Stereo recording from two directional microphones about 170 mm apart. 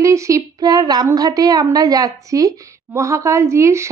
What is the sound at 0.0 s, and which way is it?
A woman's voice, 20° right (ahead or behind).